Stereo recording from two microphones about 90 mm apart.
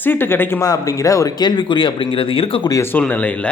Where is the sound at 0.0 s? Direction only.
25° left (ahead or behind).